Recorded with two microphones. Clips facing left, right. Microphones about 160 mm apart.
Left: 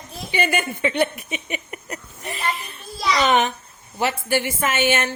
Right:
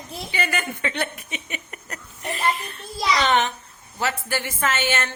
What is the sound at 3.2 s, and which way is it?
Speech, 15° left (ahead or behind).